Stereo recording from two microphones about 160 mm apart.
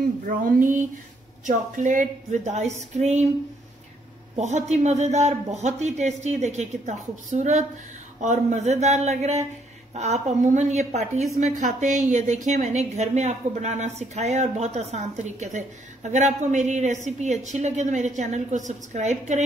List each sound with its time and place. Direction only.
0.2 s a sound: 60° right (ahead or behind)
1.4 s a woman's voice: 50° right (ahead or behind)
4.4 s a woman's voice: 45° right (ahead or behind)